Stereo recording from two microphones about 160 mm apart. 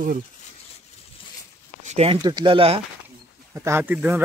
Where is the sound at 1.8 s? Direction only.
40° right (ahead or behind).